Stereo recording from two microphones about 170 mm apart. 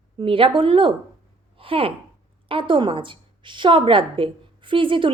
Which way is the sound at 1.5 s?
30° right (ahead or behind).